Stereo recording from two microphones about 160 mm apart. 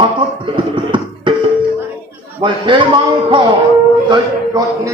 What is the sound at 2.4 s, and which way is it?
A man's voice, 30° right (ahead or behind).